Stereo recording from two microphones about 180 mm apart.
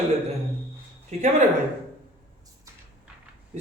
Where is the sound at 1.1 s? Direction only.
35° right (ahead or behind).